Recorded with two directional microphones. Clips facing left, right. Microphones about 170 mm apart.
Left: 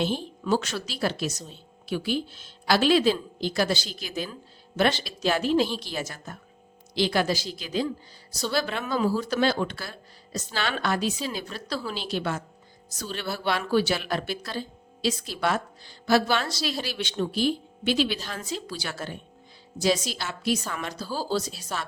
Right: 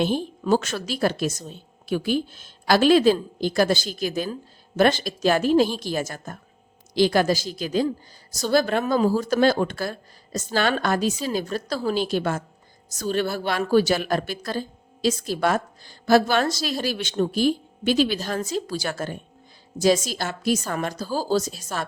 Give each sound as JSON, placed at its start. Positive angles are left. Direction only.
{"t": 0.0, "sound": "speech", "side_deg": -50}